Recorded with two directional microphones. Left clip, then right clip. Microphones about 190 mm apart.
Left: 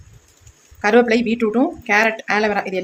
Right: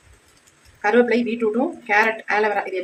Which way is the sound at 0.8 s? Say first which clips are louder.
Left 3 dB; 45° left (ahead or behind).